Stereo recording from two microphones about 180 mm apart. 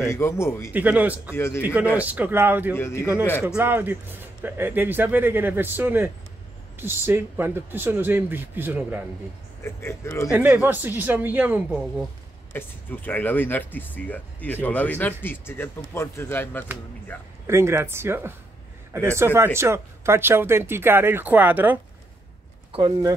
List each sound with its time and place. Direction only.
0.1 s speech: 15° left (ahead or behind)
0.7 s speech: 10° right (ahead or behind)
1.3 s speech: 15° left (ahead or behind)
1.6 s speech: 10° right (ahead or behind)
2.7 s speech: 15° left (ahead or behind)
3.4 s speech: 10° right (ahead or behind)
9.6 s speech: 15° left (ahead or behind)
10.3 s speech: 10° right (ahead or behind)
12.5 s speech: 10° left (ahead or behind)
17.5 s speech: 15° right (ahead or behind)
22.7 s speech: 25° right (ahead or behind)